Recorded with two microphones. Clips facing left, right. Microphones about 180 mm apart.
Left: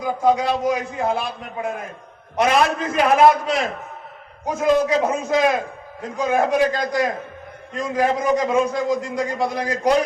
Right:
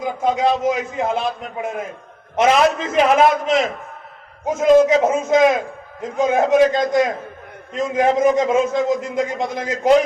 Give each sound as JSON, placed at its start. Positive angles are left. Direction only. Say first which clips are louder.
{"t": 0.0, "sound": "a man's voice", "louder": "even", "side_deg": -20}